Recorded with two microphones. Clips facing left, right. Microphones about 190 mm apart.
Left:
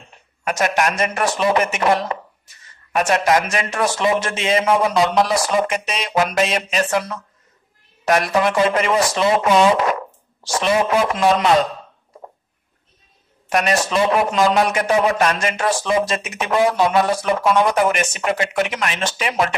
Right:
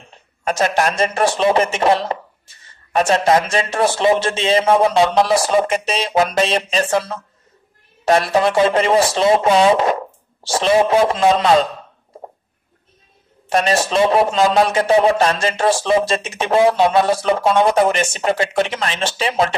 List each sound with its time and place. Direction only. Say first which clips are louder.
0.5 s speech: right 2 dB; 30° right (ahead or behind)
13.5 s speech: right 2 dB; 30° right (ahead or behind)